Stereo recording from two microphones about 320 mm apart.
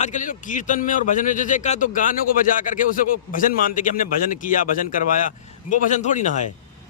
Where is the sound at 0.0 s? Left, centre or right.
Left.